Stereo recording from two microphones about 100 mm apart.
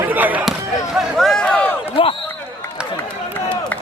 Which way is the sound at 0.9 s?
Centre (ahead or behind).